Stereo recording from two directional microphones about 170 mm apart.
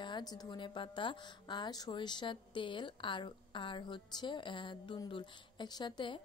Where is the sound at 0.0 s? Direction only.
25° left (ahead or behind).